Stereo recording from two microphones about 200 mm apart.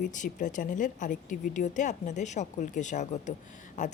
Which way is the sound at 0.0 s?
40° left (ahead or behind).